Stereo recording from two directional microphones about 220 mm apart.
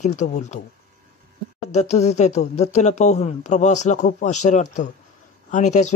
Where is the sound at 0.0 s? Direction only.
35° left (ahead or behind).